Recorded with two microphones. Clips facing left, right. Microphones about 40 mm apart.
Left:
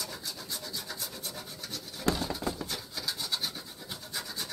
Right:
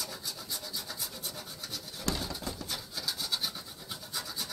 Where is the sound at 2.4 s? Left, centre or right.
Left.